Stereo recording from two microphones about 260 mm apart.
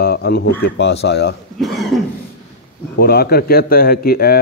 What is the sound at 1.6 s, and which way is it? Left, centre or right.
Cough, centre.